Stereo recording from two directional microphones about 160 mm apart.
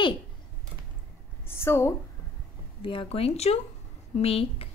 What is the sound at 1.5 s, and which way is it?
Speech, 15° left (ahead or behind).